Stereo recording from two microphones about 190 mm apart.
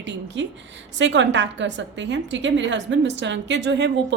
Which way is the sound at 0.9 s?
70° right (ahead or behind).